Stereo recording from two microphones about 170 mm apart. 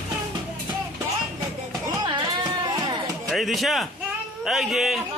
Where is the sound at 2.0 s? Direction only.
25° right (ahead or behind).